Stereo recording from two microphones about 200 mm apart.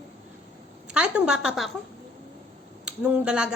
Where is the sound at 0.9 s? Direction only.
5° right (ahead or behind).